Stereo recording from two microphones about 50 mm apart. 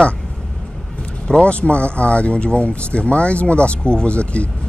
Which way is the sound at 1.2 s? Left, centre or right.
Centre.